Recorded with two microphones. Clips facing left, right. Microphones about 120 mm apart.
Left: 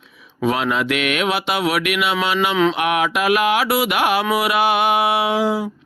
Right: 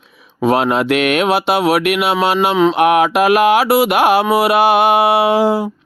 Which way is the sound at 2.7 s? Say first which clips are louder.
Right 7 dB; 45° right (ahead or behind).